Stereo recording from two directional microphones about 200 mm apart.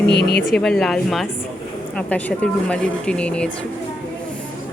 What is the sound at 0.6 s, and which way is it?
Speech, centre (ahead or behind).